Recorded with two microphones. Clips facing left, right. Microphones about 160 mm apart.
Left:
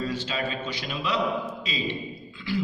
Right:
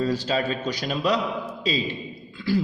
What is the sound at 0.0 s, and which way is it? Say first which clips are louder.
A man's voice: right 5 dB; 35° right (ahead or behind).